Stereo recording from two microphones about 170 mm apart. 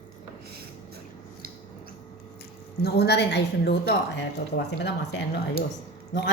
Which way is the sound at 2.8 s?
75° left (ahead or behind).